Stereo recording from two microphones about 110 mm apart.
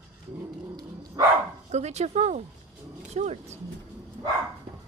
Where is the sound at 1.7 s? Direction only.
90° right.